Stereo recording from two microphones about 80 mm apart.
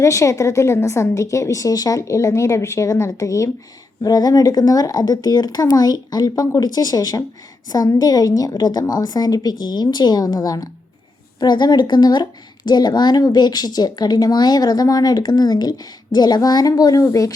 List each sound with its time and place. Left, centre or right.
0.0 s a woman's voice: left
4.0 s a woman's voice: left
11.3 s a woman's voice: left